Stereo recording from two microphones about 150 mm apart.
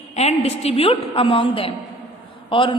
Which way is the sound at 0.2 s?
45° left (ahead or behind).